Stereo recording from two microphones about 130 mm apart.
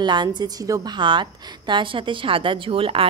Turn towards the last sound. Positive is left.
turn(degrees=-45)  # may be behind; listen again after turning